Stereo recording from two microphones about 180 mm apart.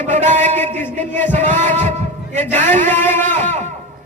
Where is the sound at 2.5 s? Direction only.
10° left (ahead or behind).